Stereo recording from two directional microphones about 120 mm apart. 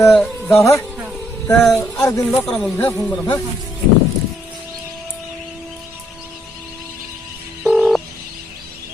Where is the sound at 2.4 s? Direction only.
5° left (ahead or behind).